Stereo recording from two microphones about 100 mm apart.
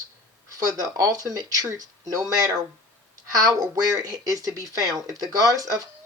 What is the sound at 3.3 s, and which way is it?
Speech, 40° right (ahead or behind).